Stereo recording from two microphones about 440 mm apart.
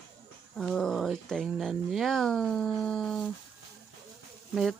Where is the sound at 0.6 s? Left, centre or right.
Centre.